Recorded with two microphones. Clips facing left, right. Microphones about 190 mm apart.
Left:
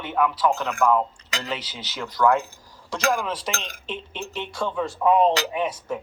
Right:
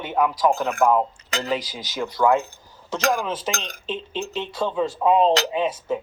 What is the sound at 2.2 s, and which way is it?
Speech, 20° right (ahead or behind).